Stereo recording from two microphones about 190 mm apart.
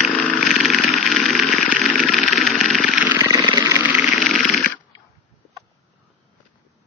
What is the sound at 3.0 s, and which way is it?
Vehicle, 15° right (ahead or behind).